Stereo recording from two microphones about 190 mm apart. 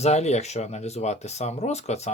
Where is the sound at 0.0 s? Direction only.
35° left (ahead or behind).